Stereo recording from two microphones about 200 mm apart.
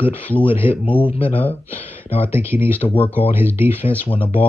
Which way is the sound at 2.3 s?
10° right (ahead or behind).